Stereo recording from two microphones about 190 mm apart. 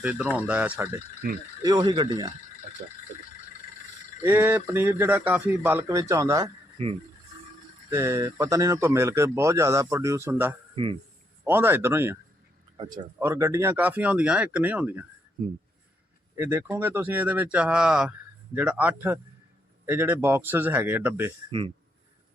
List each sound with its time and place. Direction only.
0.0 s speech: 5° right (ahead or behind)
1.6 s speech: 20° right (ahead or behind)
4.2 s speech: 10° right (ahead or behind)
7.9 s speech: 15° right (ahead or behind)
13.1 s speech: 15° right (ahead or behind)
16.3 s speech: 10° right (ahead or behind)